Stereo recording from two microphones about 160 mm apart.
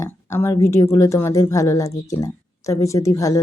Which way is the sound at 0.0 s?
15° left (ahead or behind).